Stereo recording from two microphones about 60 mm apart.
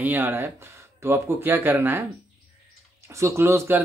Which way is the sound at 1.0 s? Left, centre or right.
Right.